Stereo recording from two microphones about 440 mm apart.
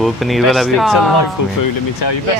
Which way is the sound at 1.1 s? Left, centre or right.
Left.